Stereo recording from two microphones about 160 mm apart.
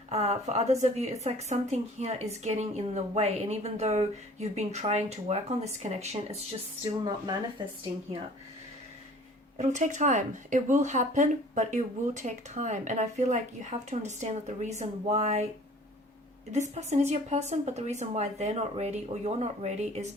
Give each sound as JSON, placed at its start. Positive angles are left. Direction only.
{"t": 0.1, "sound": "speech", "side_deg": -45}
{"t": 9.6, "sound": "speech", "side_deg": -50}
{"t": 16.5, "sound": "speech", "side_deg": -45}